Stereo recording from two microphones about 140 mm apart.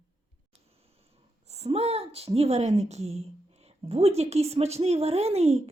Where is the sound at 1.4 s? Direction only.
50° right (ahead or behind).